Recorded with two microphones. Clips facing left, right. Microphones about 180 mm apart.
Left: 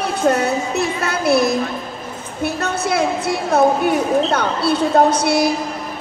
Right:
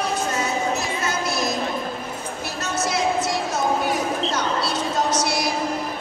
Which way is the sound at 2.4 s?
60° left (ahead or behind).